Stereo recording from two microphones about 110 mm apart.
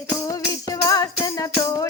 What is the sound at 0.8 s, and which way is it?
Music, 35° left (ahead or behind).